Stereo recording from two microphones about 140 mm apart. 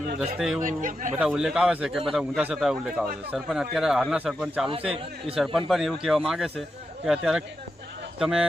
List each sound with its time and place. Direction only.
0.2 s a man's voice: 5° right (ahead or behind)
0.6 s speech: 65° right (ahead or behind)
1.2 s a man's voice: 5° right (ahead or behind)